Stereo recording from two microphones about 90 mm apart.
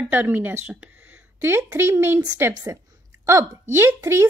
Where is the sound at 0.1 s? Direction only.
20° right (ahead or behind).